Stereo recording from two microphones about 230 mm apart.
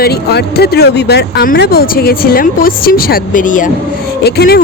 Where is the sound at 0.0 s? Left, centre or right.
Left.